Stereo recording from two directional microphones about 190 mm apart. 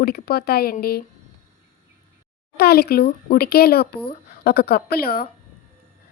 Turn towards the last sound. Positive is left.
turn(degrees=50)  # may be behind; listen again after turning